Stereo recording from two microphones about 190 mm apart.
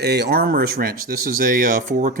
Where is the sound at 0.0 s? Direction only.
60° right (ahead or behind).